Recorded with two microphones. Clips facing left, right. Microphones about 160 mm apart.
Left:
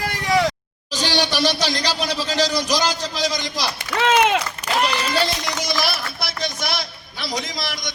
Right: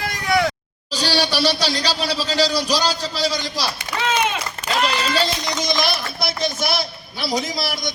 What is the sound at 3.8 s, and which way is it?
Speech, 85° left.